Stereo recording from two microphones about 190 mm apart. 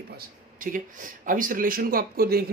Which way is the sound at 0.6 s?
45° right (ahead or behind).